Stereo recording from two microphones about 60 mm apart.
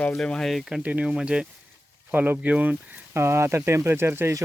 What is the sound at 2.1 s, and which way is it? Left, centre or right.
Speech, right.